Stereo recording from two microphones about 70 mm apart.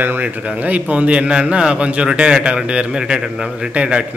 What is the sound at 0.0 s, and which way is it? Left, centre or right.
A man's voice, right.